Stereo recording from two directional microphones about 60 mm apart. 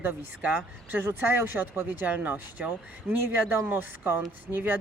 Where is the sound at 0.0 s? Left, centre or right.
Right.